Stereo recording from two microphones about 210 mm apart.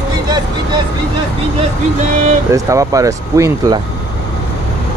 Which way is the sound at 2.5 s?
15° right (ahead or behind).